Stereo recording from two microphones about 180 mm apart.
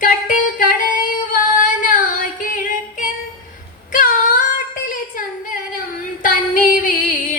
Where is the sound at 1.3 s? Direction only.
50° left (ahead or behind).